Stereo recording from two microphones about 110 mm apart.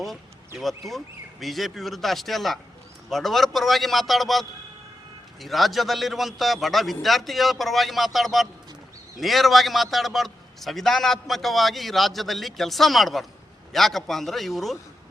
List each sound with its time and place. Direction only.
0.9 s a man's voice: centre (ahead or behind)